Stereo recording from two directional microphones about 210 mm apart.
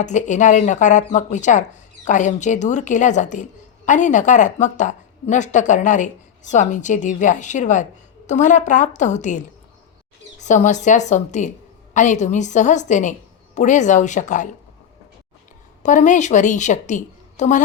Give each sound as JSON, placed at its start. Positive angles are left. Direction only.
{"t": 0.0, "sound": "a woman's voice", "side_deg": 35}
{"t": 10.4, "sound": "a woman's voice", "side_deg": 35}
{"t": 15.8, "sound": "a woman's voice", "side_deg": 35}